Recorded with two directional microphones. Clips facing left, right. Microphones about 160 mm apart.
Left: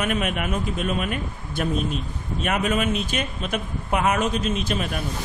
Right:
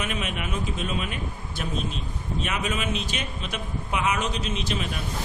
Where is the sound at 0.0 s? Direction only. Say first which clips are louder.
Left 6 dB; 55° left (ahead or behind).